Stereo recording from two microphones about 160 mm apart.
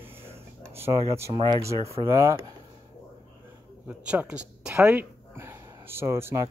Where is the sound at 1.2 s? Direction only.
25° right (ahead or behind).